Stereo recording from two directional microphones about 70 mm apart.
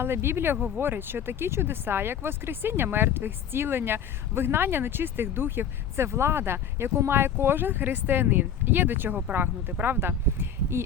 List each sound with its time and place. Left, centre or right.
0.0 s speech: right